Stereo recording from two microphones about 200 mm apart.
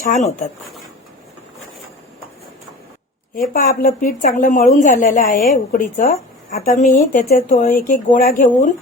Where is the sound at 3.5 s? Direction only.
50° left (ahead or behind).